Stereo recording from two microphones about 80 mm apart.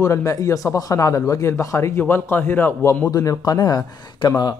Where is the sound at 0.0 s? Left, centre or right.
Left.